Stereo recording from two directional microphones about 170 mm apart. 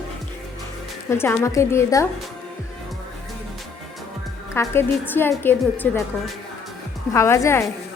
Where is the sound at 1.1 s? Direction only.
15° left (ahead or behind).